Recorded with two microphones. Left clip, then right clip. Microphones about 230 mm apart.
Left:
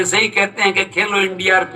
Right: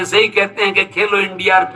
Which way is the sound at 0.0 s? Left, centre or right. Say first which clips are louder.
Right 2 dB; left.